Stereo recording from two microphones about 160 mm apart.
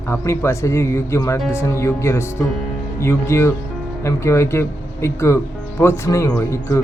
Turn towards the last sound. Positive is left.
turn(degrees=15)  # may be behind; listen again after turning